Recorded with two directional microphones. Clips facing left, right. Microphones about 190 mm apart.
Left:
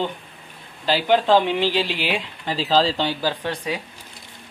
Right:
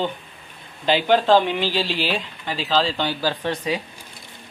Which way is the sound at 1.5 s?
20° left (ahead or behind).